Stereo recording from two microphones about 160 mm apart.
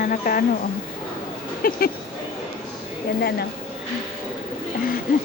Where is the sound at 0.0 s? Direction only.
60° left (ahead or behind).